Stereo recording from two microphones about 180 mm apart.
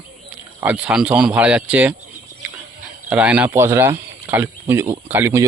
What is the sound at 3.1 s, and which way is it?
Speech, 10° right (ahead or behind).